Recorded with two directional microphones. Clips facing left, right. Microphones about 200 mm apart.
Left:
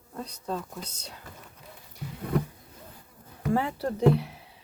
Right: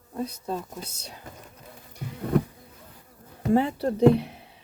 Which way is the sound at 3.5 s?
20° right (ahead or behind).